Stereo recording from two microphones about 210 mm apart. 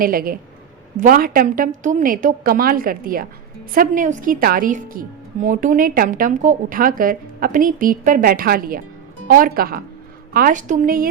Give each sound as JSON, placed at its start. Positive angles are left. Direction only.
{"t": 0.0, "sound": "a woman's voice", "side_deg": -45}